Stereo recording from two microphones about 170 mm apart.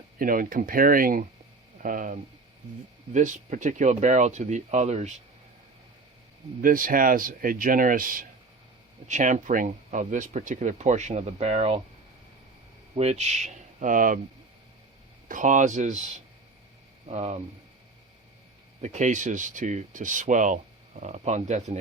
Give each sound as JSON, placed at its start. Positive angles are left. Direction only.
{"t": 0.2, "sound": "speech", "side_deg": -55}
{"t": 6.6, "sound": "speech", "side_deg": -55}
{"t": 13.0, "sound": "speech", "side_deg": -40}
{"t": 15.3, "sound": "speech", "side_deg": -50}
{"t": 18.8, "sound": "speech", "side_deg": -45}